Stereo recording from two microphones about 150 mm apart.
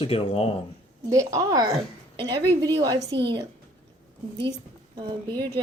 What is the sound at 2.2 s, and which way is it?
A woman's voice, 35° right (ahead or behind).